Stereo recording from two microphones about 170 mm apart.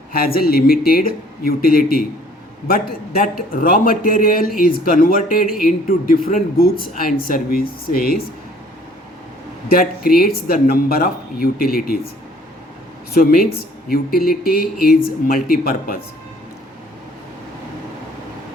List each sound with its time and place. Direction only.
0.1 s a man's voice: 60° left (ahead or behind)
9.6 s a man's voice: 60° left (ahead or behind)
13.1 s a man's voice: 60° left (ahead or behind)